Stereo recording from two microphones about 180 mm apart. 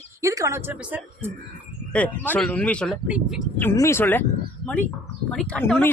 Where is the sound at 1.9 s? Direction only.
10° left (ahead or behind).